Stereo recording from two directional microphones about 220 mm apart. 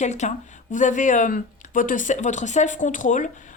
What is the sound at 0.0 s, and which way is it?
Speech, 30° left (ahead or behind).